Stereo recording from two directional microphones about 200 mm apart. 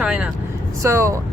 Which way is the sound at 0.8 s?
15° right (ahead or behind).